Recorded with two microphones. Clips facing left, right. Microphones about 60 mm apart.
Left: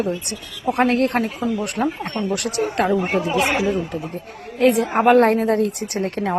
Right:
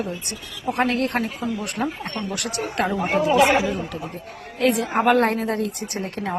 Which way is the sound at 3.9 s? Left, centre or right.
Left.